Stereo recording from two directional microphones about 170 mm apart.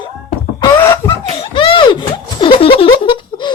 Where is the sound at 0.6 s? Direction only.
20° left (ahead or behind).